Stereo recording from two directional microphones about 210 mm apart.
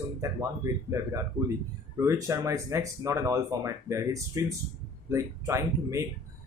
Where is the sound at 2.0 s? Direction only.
15° right (ahead or behind).